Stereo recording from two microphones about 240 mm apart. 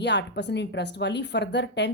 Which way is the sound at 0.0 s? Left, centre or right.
Left.